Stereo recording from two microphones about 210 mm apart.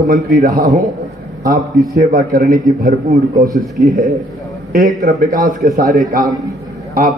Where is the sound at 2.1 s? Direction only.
40° right (ahead or behind).